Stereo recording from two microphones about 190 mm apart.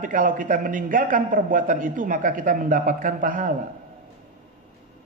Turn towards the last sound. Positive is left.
turn(degrees=-45)  # may be behind; listen again after turning